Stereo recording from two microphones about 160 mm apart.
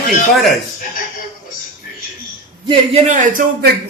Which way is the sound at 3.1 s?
55° right (ahead or behind).